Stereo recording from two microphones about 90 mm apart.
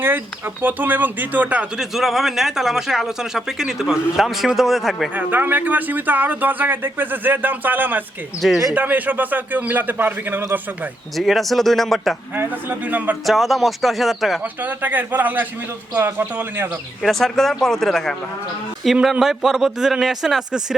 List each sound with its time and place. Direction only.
0.6 s speech: 20° right (ahead or behind)
1.8 s speech: 5° right (ahead or behind)
5.1 s speech: 20° right (ahead or behind)
8.4 s speech: centre (ahead or behind)
8.7 s speech: 20° right (ahead or behind)
11.2 s speech: centre (ahead or behind)
12.4 s speech: 20° right (ahead or behind)
13.2 s speech: centre (ahead or behind)
14.6 s speech: 20° right (ahead or behind)
17.0 s speech: 5° left (ahead or behind)